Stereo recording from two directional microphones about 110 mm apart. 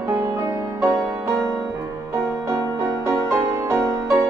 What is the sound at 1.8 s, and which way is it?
Music, 25° right (ahead or behind).